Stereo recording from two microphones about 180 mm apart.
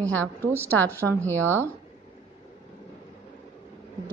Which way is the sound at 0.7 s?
10° left (ahead or behind).